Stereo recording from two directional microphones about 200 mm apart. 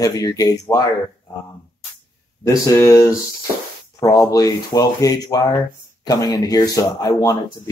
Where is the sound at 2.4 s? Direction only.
15° left (ahead or behind).